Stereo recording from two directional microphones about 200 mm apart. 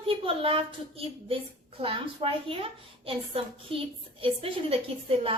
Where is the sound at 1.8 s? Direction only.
30° right (ahead or behind).